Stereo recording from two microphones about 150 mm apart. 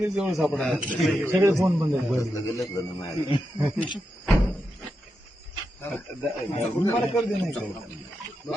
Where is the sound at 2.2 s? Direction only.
20° left (ahead or behind).